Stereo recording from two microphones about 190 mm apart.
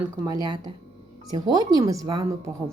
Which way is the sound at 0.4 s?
25° right (ahead or behind).